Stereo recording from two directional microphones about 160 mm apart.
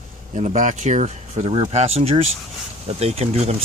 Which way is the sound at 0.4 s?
50° right (ahead or behind).